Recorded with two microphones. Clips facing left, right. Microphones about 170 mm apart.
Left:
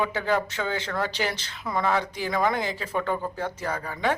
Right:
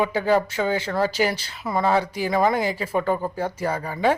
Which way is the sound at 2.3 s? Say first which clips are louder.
Right 4 dB; 25° right (ahead or behind).